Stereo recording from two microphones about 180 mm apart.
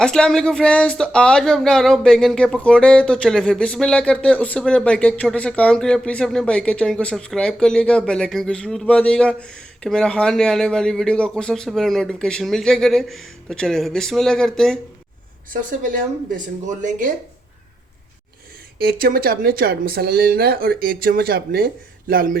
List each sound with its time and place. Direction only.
0.0 s speech: 5° left (ahead or behind)
15.8 s speech: 50° right (ahead or behind)
18.8 s speech: 55° right (ahead or behind)